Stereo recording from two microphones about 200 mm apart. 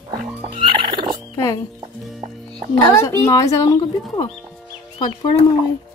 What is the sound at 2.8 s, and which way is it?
A child's voice, 15° left (ahead or behind).